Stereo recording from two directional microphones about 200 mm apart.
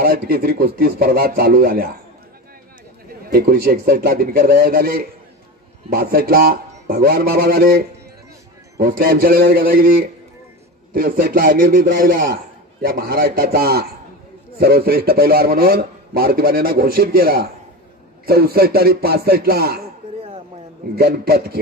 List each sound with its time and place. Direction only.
0.0 s a man's voice: 50° right (ahead or behind)
3.3 s a man's voice: 50° right (ahead or behind)
20.9 s a man's voice: 50° right (ahead or behind)